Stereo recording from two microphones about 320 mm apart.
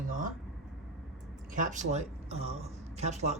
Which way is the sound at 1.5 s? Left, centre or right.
Right.